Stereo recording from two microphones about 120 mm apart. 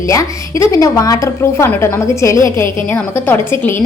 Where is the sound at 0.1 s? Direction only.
25° left (ahead or behind).